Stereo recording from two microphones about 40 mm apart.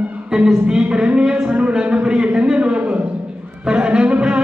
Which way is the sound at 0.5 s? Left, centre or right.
Centre.